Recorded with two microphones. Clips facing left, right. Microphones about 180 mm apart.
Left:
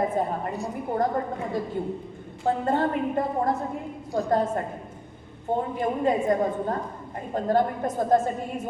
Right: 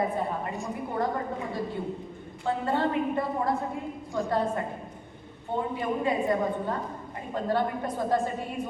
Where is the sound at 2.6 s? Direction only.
45° left (ahead or behind).